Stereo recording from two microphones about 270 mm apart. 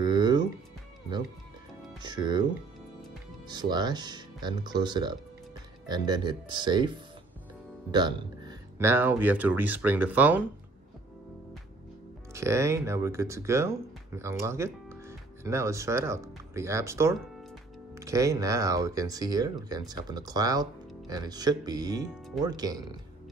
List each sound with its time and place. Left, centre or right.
0.0 s music: centre
2.0 s speech: centre
3.4 s speech: centre
7.9 s speech: centre
12.4 s speech: centre